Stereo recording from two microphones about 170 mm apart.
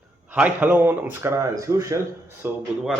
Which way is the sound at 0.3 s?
10° right (ahead or behind).